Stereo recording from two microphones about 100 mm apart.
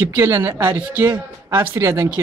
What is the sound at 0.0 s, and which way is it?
A woman's voice, 25° right (ahead or behind).